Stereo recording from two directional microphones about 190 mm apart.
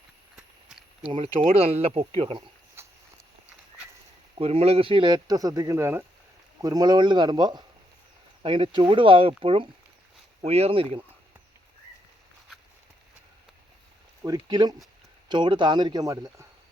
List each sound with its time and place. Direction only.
0.3 s run: centre (ahead or behind)
1.0 s speech: 25° right (ahead or behind)
2.8 s walk: 15° right (ahead or behind)
4.4 s speech: 30° right (ahead or behind)
14.3 s speech: 20° right (ahead or behind)